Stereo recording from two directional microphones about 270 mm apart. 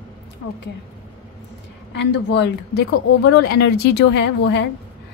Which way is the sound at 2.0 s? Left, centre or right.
Left.